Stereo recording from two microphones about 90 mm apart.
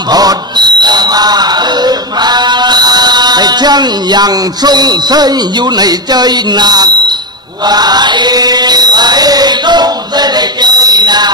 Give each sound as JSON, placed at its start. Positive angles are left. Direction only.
{"t": 0.1, "sound": "fire alarm", "side_deg": -45}
{"t": 7.6, "sound": "chant", "side_deg": -50}